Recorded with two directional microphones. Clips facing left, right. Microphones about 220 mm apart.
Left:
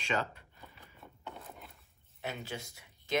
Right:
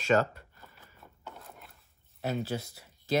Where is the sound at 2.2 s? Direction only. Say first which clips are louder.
Right 8 dB; 40° right (ahead or behind).